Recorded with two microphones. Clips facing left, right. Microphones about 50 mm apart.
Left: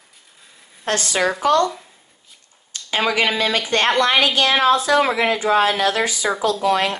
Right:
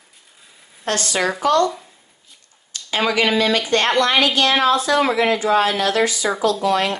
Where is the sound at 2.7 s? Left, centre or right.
Left.